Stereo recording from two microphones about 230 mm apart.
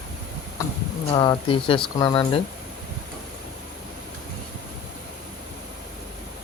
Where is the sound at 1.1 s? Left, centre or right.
Left.